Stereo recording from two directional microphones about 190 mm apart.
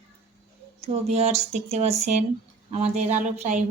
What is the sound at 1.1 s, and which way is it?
A woman's voice, 35° right (ahead or behind).